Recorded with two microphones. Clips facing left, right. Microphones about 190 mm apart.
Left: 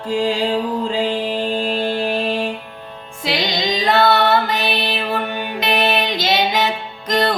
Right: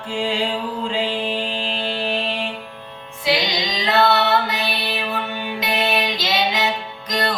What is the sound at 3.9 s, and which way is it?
Female singing, 50° left (ahead or behind).